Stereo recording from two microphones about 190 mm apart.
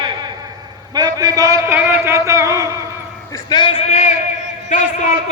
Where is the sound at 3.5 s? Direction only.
25° left (ahead or behind).